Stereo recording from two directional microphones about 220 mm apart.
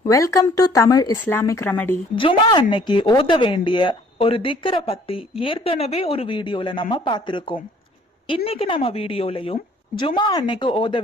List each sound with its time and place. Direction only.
0.0 s speech: 15° left (ahead or behind)
2.1 s speech: 20° left (ahead or behind)